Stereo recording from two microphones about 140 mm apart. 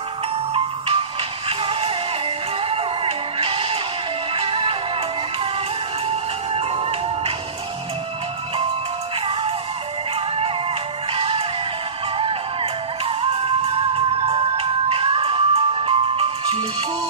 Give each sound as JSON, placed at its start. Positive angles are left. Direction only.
{"t": 0.5, "sound": "music", "side_deg": -40}
{"t": 6.0, "sound": "music", "side_deg": -45}
{"t": 9.2, "sound": "music", "side_deg": -45}
{"t": 13.0, "sound": "music", "side_deg": -45}